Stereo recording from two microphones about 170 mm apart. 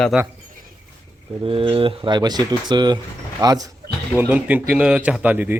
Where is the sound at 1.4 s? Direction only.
35° right (ahead or behind).